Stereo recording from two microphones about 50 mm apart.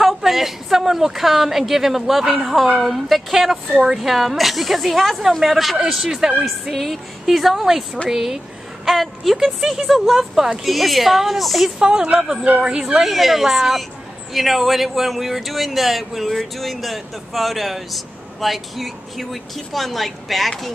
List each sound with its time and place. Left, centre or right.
0.0 s speech: centre
11.8 s speech: centre